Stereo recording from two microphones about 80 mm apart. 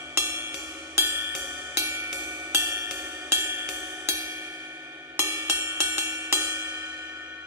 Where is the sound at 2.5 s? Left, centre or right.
Right.